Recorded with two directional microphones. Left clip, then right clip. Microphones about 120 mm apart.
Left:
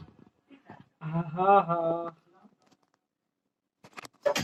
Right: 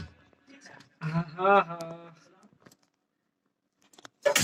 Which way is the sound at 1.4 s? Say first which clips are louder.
Left 1 dB; 25° left (ahead or behind).